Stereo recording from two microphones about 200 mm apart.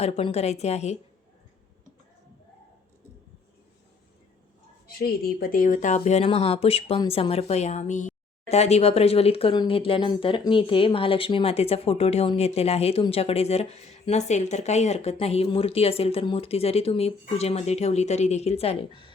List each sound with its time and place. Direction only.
0.0 s speech: 30° left (ahead or behind)
4.9 s speech: 50° left (ahead or behind); by 19.1 s 25° left (ahead or behind)